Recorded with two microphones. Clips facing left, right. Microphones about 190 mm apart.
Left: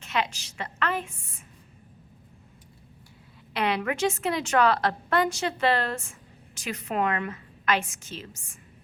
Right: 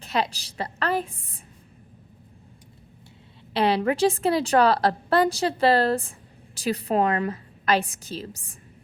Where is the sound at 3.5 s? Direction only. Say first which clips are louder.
Right 5 dB; 30° right (ahead or behind).